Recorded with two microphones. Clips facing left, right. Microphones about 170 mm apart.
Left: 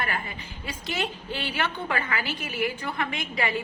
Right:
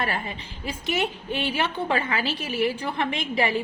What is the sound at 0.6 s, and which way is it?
A woman's voice, 25° right (ahead or behind).